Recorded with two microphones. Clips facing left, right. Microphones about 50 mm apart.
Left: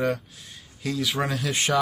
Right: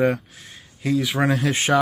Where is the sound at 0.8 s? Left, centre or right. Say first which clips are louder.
Right 5 dB; centre.